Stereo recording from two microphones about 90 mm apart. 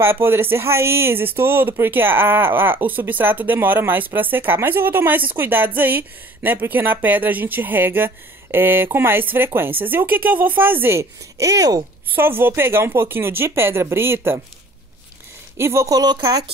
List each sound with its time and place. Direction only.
0.0 s speech: 25° right (ahead or behind)
12.1 s speech: 25° right (ahead or behind)
15.5 s speech: 30° right (ahead or behind)
16.0 s speech: 50° right (ahead or behind)